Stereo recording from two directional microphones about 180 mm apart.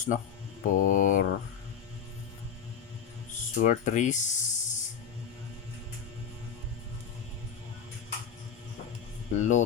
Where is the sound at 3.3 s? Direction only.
45° left (ahead or behind).